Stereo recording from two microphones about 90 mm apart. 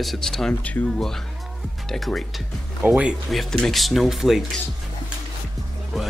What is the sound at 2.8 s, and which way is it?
Speech, 15° right (ahead or behind).